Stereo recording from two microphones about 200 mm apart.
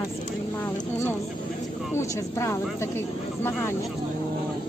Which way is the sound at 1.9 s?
15° left (ahead or behind).